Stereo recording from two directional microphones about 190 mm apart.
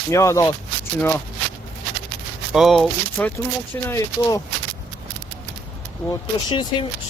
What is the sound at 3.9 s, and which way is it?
Speech, 15° left (ahead or behind).